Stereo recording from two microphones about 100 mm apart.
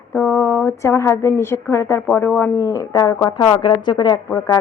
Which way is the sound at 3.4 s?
55° left (ahead or behind).